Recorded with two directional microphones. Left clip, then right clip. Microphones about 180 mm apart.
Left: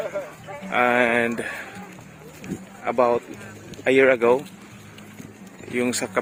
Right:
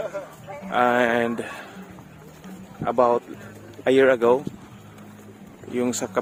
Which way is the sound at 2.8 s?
15° right (ahead or behind).